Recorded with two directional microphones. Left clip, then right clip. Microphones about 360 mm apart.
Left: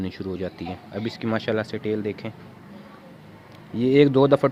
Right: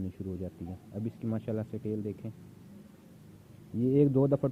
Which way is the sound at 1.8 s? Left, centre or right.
Left.